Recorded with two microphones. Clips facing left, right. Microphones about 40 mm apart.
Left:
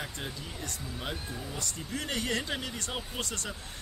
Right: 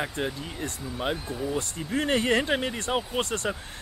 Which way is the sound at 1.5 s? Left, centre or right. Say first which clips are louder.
Right 8 dB; right.